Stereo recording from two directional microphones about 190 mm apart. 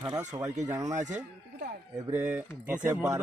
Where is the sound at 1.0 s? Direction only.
40° right (ahead or behind).